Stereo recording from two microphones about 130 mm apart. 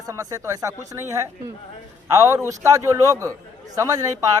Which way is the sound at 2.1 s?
25° right (ahead or behind).